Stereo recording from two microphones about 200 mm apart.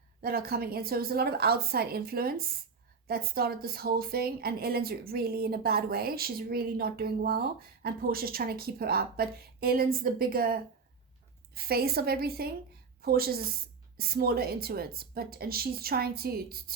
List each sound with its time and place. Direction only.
0.2 s a woman's voice: 50° right (ahead or behind)